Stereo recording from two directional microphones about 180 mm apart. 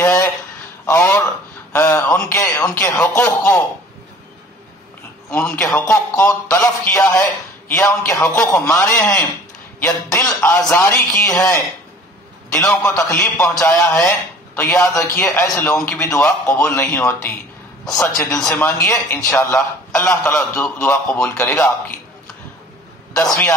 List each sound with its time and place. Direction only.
0.0 s a sound: 15° left (ahead or behind)
2.8 s a man's voice: 10° left (ahead or behind)
5.3 s a man's voice: 5° left (ahead or behind)
13.6 s a man's voice: 5° left (ahead or behind)